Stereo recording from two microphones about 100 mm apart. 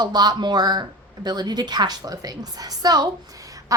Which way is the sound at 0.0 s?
45° right (ahead or behind).